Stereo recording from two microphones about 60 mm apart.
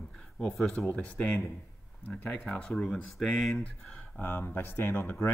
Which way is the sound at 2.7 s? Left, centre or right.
Centre.